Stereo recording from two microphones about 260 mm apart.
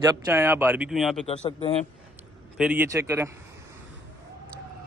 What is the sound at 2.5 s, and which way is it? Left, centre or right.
Speech, centre.